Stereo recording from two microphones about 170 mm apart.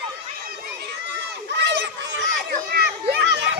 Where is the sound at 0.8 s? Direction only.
85° right.